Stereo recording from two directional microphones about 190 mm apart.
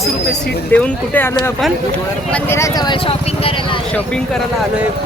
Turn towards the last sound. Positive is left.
turn(degrees=25)  # may be behind; listen again after turning